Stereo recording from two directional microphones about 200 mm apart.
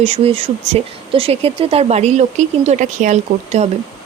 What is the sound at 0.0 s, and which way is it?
Speech, 30° right (ahead or behind).